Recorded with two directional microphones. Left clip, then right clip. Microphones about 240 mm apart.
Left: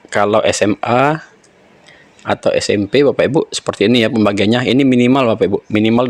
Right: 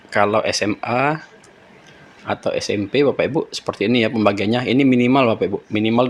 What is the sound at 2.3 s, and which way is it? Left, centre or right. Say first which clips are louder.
Speech: left 7 dB; left.